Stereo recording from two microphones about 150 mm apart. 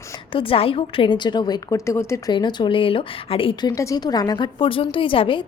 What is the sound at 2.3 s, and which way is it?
A woman's voice, 30° left (ahead or behind).